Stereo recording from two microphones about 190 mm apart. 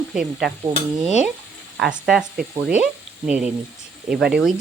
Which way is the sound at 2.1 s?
5° right (ahead or behind).